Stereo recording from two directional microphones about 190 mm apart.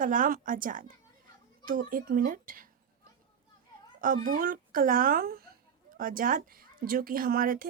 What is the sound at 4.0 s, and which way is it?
A child's voice, 45° right (ahead or behind).